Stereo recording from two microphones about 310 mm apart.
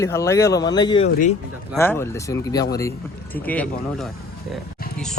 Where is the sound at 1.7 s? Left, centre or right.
Centre.